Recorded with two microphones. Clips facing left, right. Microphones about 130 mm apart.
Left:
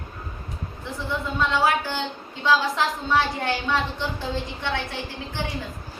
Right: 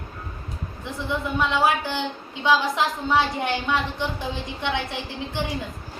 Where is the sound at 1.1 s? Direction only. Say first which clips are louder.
Right 1 dB; 15° right (ahead or behind).